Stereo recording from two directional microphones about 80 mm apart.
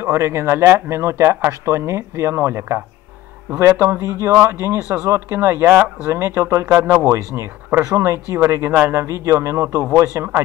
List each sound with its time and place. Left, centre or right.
0.0 s speech: right
3.8 s speech: right